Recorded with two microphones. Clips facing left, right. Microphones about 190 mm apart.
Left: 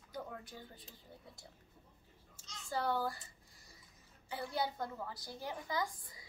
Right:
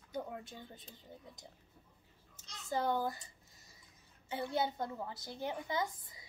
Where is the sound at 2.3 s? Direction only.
20° right (ahead or behind).